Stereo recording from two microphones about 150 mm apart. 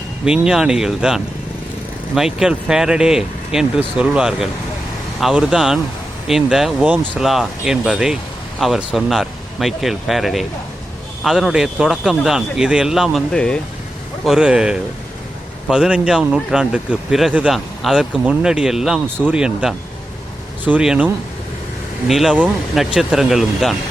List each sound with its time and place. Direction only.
0.3 s speech: 5° right (ahead or behind)
14.3 s speech: 5° right (ahead or behind)